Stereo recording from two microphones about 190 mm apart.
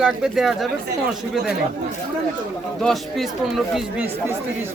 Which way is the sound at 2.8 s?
Centre (ahead or behind).